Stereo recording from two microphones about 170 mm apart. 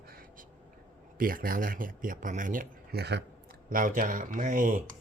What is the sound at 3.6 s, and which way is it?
Speech, 55° right (ahead or behind).